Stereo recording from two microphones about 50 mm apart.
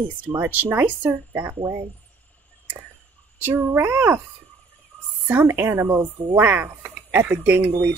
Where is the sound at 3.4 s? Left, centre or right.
Right.